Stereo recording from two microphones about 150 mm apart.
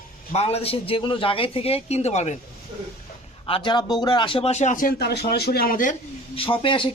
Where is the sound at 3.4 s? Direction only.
35° left (ahead or behind); by 6.0 s 60° left (ahead or behind).